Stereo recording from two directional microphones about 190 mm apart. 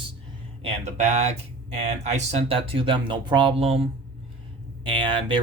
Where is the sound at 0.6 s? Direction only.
40° right (ahead or behind).